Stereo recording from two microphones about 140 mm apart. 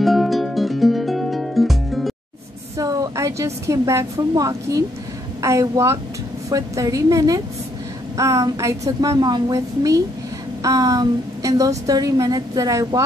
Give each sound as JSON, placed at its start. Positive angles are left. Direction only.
{"t": 0.0, "sound": "music", "side_deg": 0}
{"t": 2.8, "sound": "a woman's voice", "side_deg": -25}